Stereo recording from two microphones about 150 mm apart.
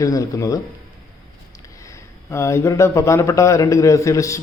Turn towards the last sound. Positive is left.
turn(degrees=20)  # may be behind; listen again after turning